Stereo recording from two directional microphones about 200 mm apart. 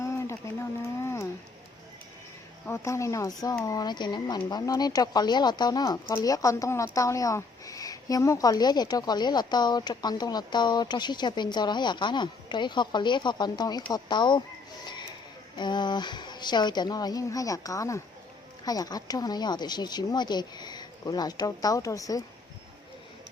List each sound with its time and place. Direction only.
0.0 s a sound: 15° left (ahead or behind)
2.6 s speech: 15° left (ahead or behind)
15.5 s speech: 20° left (ahead or behind)